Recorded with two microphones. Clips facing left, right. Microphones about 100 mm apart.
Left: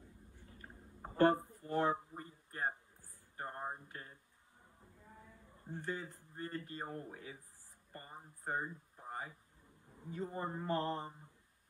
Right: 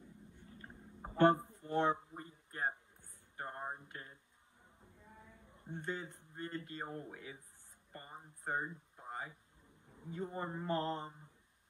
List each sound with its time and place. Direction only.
1.2 s music: 20° right (ahead or behind)
3.3 s a sound: 20° right (ahead or behind)
5.5 s speech: 20° right (ahead or behind)
8.5 s a sound: 20° right (ahead or behind)
10.0 s mantra: 20° right (ahead or behind)
10.3 s mantra: 20° left (ahead or behind)
10.6 s mantra: 20° right (ahead or behind)